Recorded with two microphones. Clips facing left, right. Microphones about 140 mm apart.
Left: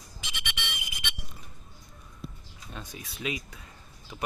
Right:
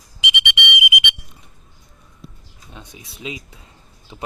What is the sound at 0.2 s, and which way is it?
Whistle, 75° right (ahead or behind).